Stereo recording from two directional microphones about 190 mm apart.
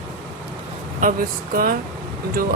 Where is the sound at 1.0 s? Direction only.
45° right (ahead or behind).